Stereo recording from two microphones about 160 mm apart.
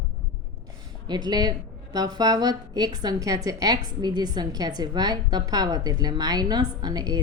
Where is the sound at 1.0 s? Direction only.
25° right (ahead or behind).